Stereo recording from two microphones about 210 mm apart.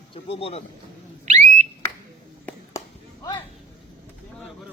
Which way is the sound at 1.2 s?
35° right (ahead or behind).